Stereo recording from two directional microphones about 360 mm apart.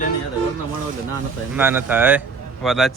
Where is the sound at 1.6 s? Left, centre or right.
Centre.